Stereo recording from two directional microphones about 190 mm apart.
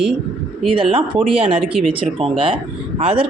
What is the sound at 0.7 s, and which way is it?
Speech, 30° right (ahead or behind).